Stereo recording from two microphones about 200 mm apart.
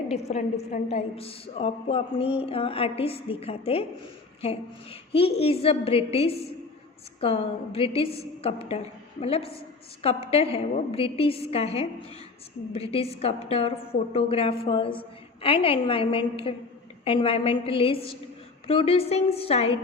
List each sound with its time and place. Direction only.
0.1 s a woman's voice: 35° left (ahead or behind)